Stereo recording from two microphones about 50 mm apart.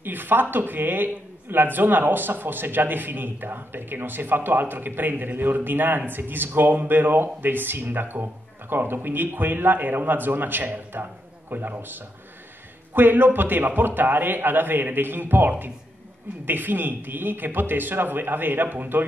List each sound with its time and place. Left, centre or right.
0.0 s a man's voice: right